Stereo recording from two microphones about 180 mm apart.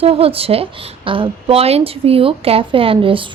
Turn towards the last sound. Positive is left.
turn(degrees=-30)  # may be behind; listen again after turning